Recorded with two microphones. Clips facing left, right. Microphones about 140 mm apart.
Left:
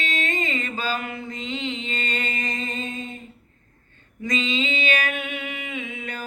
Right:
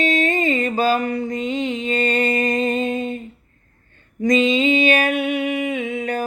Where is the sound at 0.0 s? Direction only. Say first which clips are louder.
Right 9 dB; 40° right (ahead or behind).